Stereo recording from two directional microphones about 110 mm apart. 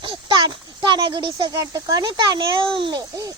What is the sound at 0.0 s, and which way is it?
A child's voice, 45° right (ahead or behind).